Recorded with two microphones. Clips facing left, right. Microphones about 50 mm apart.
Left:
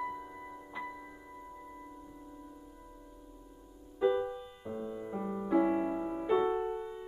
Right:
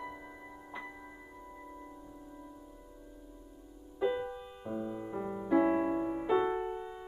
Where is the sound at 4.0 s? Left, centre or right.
Centre.